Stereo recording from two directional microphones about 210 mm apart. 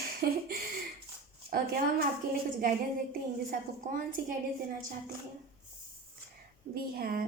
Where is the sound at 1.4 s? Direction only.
45° right (ahead or behind).